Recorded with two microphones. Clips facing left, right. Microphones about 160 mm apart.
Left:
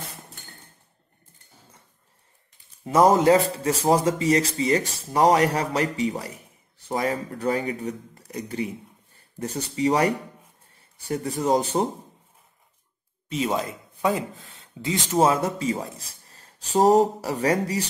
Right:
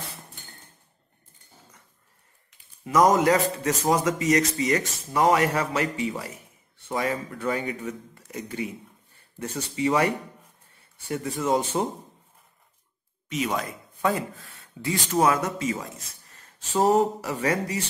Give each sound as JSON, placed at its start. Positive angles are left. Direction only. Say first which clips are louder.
{"t": 2.8, "sound": "speech", "louder": "left 2 dB", "side_deg": 30}
{"t": 13.3, "sound": "speech", "louder": "left 2 dB", "side_deg": 25}